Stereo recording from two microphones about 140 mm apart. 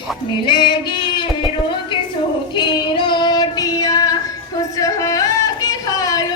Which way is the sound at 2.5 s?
35° left (ahead or behind).